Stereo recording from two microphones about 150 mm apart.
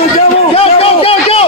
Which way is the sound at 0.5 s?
40° left (ahead or behind).